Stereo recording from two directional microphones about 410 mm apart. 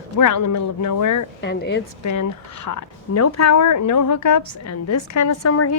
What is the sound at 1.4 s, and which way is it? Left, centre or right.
Speech, left.